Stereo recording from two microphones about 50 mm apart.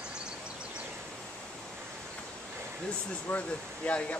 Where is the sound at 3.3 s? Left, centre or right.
Left.